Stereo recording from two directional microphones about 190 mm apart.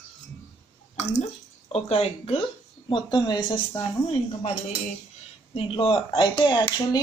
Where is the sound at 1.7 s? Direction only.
30° left (ahead or behind).